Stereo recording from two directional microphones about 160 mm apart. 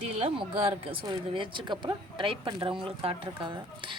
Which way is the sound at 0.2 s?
35° right (ahead or behind).